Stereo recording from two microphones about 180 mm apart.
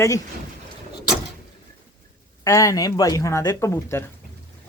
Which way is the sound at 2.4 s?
15° left (ahead or behind).